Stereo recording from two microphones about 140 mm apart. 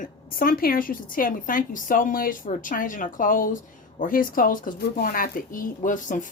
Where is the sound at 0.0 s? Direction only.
90° left.